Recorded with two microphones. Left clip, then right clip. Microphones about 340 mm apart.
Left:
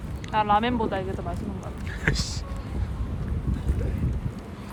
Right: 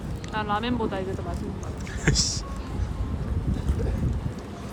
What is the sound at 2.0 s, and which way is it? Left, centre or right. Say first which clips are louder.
Speech: right 3 dB; centre.